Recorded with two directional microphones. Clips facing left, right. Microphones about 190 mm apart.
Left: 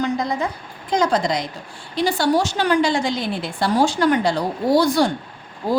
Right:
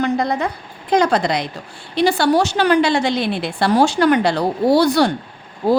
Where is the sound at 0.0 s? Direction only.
60° right (ahead or behind).